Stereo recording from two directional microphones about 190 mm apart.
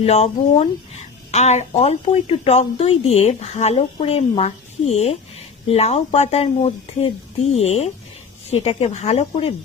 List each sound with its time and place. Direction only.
0.0 s speech: 35° left (ahead or behind)